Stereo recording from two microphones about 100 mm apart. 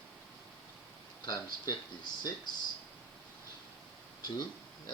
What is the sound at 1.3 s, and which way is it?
Speech, 45° left (ahead or behind).